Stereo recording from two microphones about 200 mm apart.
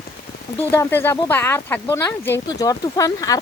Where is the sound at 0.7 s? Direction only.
10° left (ahead or behind).